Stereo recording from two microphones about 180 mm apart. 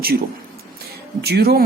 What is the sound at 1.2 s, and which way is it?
Speech, 60° right (ahead or behind).